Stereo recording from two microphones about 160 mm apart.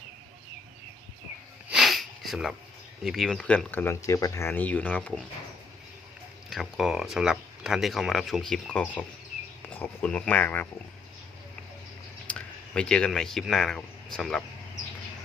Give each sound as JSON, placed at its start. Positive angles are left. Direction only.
{"t": 1.7, "sound": "sniff", "side_deg": 0}
{"t": 3.0, "sound": "speech", "side_deg": 0}
{"t": 6.5, "sound": "speech", "side_deg": 0}
{"t": 12.3, "sound": "speech", "side_deg": 5}